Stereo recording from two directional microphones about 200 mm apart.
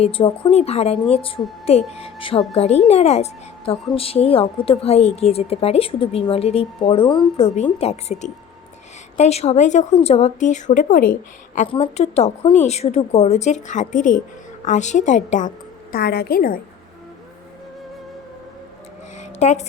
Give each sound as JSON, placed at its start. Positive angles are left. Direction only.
{"t": 0.0, "sound": "speech", "side_deg": 30}
{"t": 19.4, "sound": "speech", "side_deg": 35}